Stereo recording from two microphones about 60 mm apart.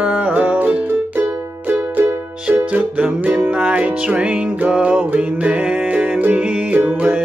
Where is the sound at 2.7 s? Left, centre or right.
Right.